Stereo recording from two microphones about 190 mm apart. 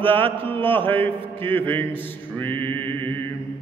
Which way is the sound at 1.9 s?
10° left (ahead or behind).